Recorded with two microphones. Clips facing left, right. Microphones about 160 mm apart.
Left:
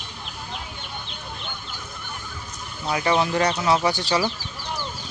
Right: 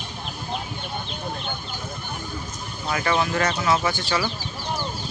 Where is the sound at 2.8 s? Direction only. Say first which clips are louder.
Left 2 dB; 20° left (ahead or behind).